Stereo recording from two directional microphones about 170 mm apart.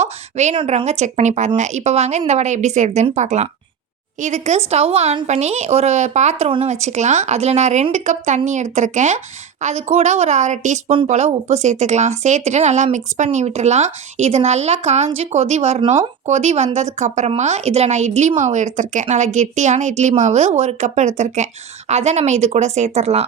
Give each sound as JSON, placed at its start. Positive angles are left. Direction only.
{"t": 0.0, "sound": "a woman's voice", "side_deg": -40}